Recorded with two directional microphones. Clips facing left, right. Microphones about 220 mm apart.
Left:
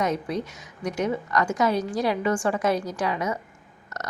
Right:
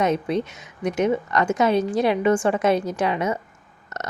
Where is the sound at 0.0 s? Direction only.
25° right (ahead or behind).